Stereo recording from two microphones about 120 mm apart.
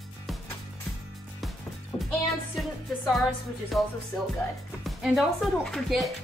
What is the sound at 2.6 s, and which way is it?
Music, centre (ahead or behind).